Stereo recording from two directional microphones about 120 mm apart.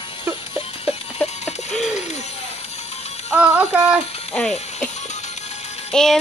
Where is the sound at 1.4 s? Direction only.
70° left (ahead or behind).